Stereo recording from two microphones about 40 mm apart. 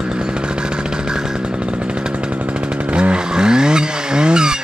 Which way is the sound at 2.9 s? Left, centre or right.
Right.